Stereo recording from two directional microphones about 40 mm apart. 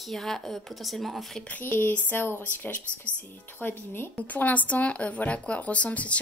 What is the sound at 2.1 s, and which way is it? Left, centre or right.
Speech, left.